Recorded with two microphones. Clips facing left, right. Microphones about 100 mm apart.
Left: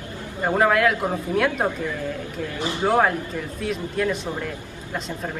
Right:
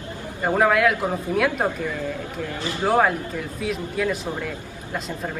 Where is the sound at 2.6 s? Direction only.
20° left (ahead or behind).